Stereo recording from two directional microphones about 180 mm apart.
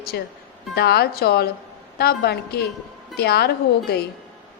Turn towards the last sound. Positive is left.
turn(degrees=60)  # may be behind; listen again after turning